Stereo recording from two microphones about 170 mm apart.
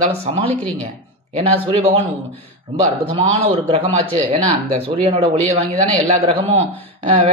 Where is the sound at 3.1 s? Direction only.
35° right (ahead or behind).